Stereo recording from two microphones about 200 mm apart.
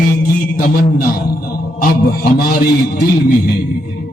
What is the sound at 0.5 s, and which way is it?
A man's voice, 45° left (ahead or behind).